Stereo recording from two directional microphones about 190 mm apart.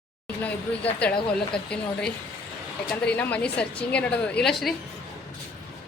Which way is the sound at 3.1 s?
5° left (ahead or behind).